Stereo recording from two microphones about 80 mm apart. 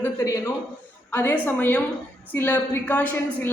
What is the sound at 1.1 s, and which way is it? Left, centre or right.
A woman's voice, left.